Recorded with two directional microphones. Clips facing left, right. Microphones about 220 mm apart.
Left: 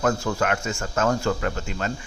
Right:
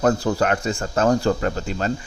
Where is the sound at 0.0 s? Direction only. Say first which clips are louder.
Right 4 dB; 35° right (ahead or behind).